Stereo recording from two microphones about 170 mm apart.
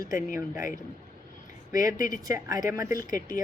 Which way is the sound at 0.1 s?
50° left (ahead or behind).